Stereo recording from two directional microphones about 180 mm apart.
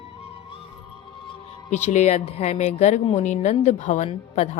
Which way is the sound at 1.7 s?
40° left (ahead or behind).